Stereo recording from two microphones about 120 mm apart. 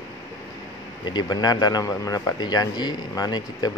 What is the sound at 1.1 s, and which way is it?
Speech, 35° left (ahead or behind).